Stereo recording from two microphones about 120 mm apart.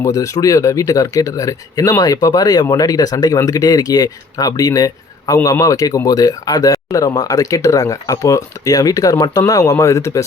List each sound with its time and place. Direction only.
0.0 s speech: 30° left (ahead or behind)